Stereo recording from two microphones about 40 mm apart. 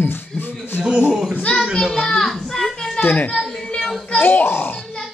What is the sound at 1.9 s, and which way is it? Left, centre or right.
A child's voice, centre.